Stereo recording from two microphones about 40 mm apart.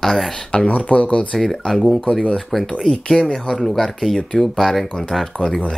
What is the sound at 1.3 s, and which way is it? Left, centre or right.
Speech, centre.